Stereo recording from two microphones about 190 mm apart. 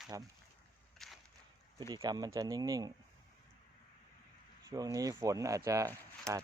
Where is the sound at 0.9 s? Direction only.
Centre (ahead or behind).